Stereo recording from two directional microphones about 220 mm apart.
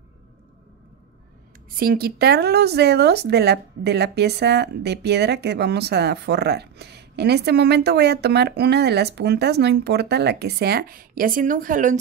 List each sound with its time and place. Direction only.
1.8 s speech: 45° right (ahead or behind)